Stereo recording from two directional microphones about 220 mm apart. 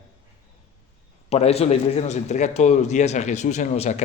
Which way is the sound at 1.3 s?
30° left (ahead or behind).